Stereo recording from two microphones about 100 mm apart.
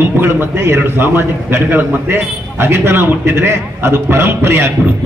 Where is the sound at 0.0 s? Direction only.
25° right (ahead or behind).